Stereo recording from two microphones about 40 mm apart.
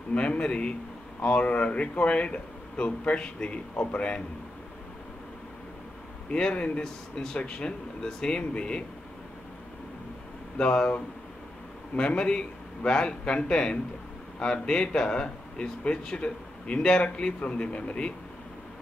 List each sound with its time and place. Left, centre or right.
0.1 s a man's voice: left
6.3 s speech: left
6.8 s speech: centre
7.3 s a man's voice: left
10.6 s a man's voice: left